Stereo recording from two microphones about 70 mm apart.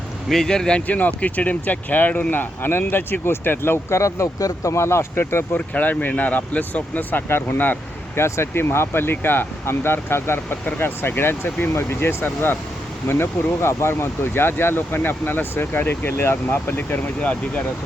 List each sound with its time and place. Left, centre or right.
0.3 s speech: centre
0.9 s speech: left
5.5 s speech: left
8.1 s speech: left; by 17.6 s centre